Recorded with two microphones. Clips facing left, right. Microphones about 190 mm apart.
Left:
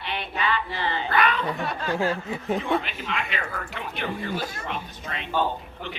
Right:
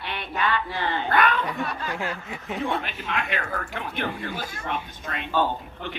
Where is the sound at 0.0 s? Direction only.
50° right (ahead or behind).